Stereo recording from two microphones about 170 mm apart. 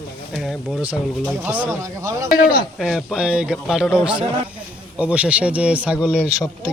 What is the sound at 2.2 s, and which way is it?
Speech, 60° left (ahead or behind).